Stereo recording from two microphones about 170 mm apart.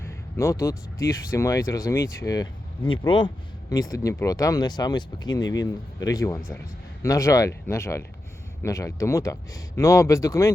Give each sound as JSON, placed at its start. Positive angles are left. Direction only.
{"t": 0.0, "sound": "speech", "side_deg": 15}